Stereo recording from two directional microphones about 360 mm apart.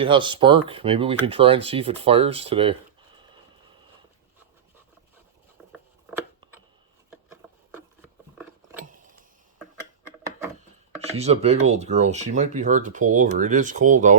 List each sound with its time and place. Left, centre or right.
0.0 s speech: centre
5.7 s scissors: centre
7.3 s a sound: centre
11.0 s speech: centre